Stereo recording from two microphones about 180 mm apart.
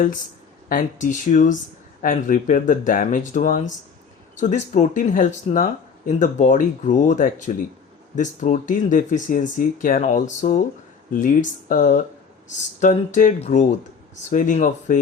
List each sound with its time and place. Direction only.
0.7 s speech: 45° left (ahead or behind)